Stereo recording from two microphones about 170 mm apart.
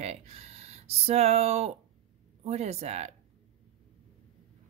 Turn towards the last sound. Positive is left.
turn(degrees=-40)  # may be behind; listen again after turning